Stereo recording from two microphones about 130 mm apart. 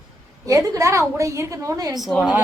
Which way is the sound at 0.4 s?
25° right (ahead or behind).